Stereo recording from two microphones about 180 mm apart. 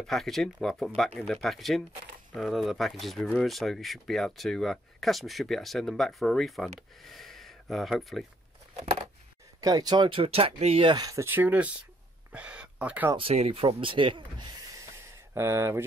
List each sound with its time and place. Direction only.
0.0 s speech: centre (ahead or behind)
9.6 s speech: 20° right (ahead or behind)
10.9 s speech: 20° right (ahead or behind)
12.3 s a sound: 5° right (ahead or behind)
13.1 s speech: 35° right (ahead or behind)
15.3 s speech: 15° right (ahead or behind)